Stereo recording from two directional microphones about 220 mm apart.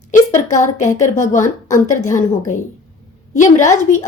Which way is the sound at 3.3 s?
35° left (ahead or behind).